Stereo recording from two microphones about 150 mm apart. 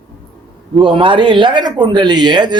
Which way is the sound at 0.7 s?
35° right (ahead or behind).